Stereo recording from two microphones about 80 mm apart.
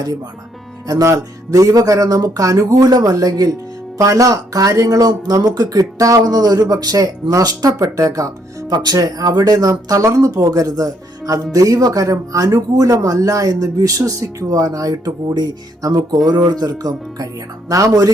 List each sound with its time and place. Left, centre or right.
0.9 s speech: right
8.7 s speech: right